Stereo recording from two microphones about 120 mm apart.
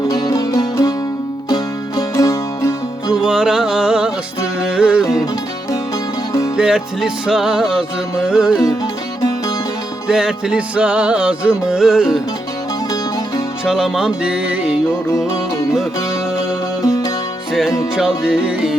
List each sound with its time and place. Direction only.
0.1 s music: 30° left (ahead or behind)
3.1 s music: 5° right (ahead or behind)
6.6 s music: 5° right (ahead or behind)
10.1 s music: 5° right (ahead or behind)
13.7 s music: 5° right (ahead or behind)
15.1 s music: 25° left (ahead or behind)
16.8 s music: 25° left (ahead or behind)
17.5 s music: centre (ahead or behind)